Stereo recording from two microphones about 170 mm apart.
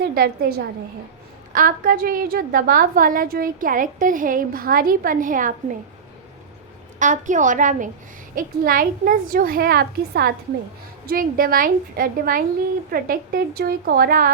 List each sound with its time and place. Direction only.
0.0 s a woman's voice: 60° right (ahead or behind)
1.5 s a woman's voice: 55° right (ahead or behind)
7.0 s a woman's voice: 50° right (ahead or behind)